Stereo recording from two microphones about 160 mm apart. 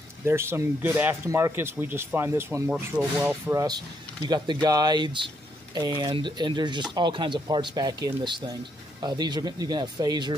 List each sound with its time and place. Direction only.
0.2 s speech: 15° right (ahead or behind)
3.5 s speech: 25° right (ahead or behind)